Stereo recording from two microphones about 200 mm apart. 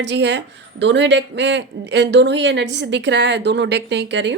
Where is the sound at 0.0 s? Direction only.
60° right (ahead or behind).